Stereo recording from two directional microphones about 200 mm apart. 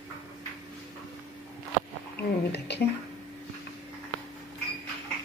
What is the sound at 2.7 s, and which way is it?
Speech, 55° left (ahead or behind).